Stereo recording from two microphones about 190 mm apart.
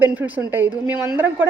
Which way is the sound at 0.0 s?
10° right (ahead or behind).